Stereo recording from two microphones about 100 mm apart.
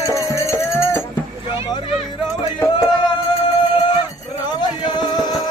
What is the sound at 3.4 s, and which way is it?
Music, 50° left (ahead or behind).